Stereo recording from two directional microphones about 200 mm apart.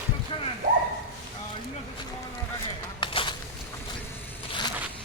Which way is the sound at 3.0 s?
25° left (ahead or behind).